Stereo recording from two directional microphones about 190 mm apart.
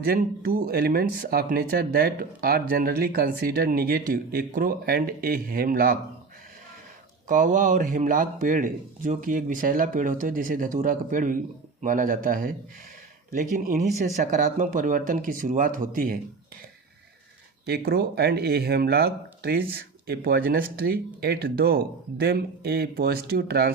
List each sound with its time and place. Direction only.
0.1 s speech: 50° right (ahead or behind)
7.3 s speech: 45° right (ahead or behind)
17.7 s speech: 55° right (ahead or behind)